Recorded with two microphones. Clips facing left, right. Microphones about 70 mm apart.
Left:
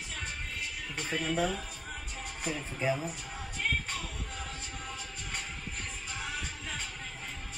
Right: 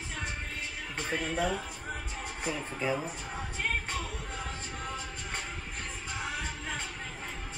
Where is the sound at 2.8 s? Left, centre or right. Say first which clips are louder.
Left 1 dB; right.